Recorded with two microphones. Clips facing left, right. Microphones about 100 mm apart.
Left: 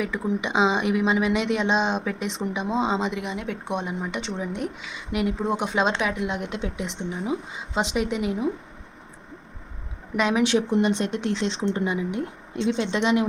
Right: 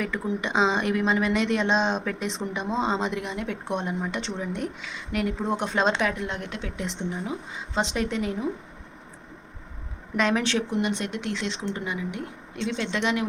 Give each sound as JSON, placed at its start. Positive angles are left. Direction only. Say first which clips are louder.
{"t": 0.0, "sound": "speech", "louder": "left 2 dB", "side_deg": 5}
{"t": 6.7, "sound": "speech", "louder": "even", "side_deg": 0}
{"t": 7.3, "sound": "speech", "louder": "left 4 dB", "side_deg": 15}
{"t": 10.2, "sound": "speech", "louder": "left 3 dB", "side_deg": 10}
{"t": 10.7, "sound": "speech", "louder": "left 5 dB", "side_deg": 30}